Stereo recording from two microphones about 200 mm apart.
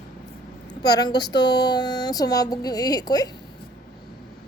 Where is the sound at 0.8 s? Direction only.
20° left (ahead or behind).